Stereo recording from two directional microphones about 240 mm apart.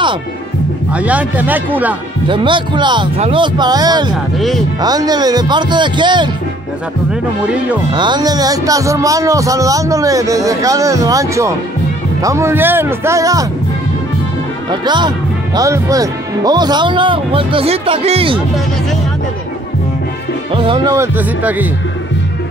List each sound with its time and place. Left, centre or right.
0.9 s speech: centre
2.2 s speech: centre
4.4 s speech: centre
4.8 s speech: centre
7.9 s speech: centre
14.7 s speech: centre
20.5 s speech: right